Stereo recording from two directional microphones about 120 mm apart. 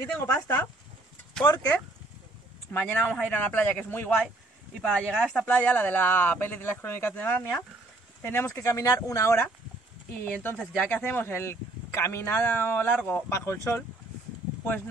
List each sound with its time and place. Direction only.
0.1 s speech: 15° left (ahead or behind)
1.4 s speech: 30° left (ahead or behind)
2.7 s speech: 10° left (ahead or behind)